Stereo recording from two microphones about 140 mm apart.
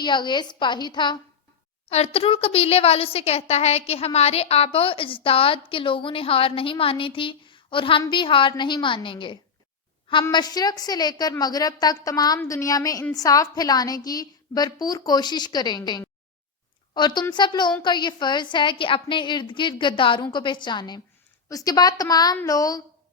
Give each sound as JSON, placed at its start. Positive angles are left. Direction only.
{"t": 0.0, "sound": "a woman's voice", "side_deg": 35}
{"t": 1.9, "sound": "a woman's voice", "side_deg": 45}